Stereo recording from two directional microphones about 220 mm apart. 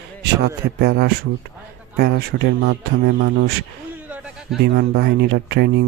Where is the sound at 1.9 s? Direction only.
45° right (ahead or behind).